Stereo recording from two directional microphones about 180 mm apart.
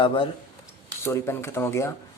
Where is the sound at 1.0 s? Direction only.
15° left (ahead or behind).